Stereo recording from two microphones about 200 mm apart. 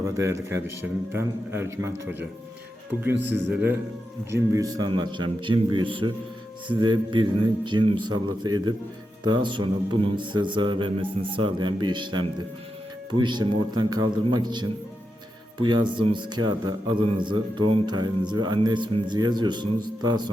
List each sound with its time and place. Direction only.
0.0 s a man's voice: 15° right (ahead or behind)